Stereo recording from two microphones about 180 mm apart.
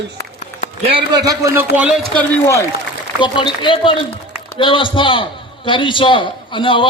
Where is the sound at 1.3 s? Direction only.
15° right (ahead or behind).